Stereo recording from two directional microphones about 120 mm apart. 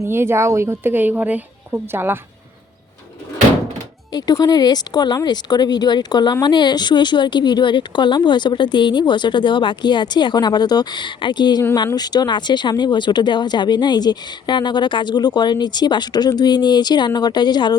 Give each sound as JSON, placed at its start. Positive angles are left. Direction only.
{"t": 0.0, "sound": "a woman's voice", "side_deg": -20}
{"t": 4.1, "sound": "speech", "side_deg": 35}